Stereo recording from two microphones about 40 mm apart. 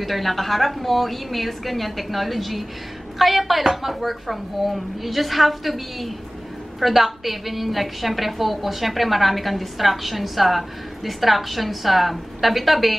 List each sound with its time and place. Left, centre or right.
0.0 s a woman's voice: centre